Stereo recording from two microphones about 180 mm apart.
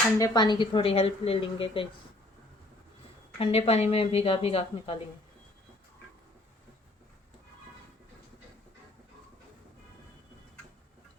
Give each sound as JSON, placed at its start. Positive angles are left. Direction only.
{"t": 0.2, "sound": "a woman's voice", "side_deg": 25}
{"t": 3.3, "sound": "a woman's voice", "side_deg": 30}